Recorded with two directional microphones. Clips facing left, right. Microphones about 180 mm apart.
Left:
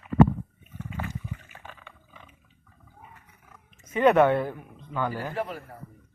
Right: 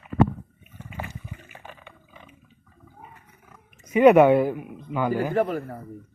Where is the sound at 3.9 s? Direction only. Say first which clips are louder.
Right 5 dB; 10° right (ahead or behind).